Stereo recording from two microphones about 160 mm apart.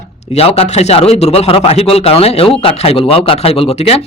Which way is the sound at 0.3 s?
40° left (ahead or behind).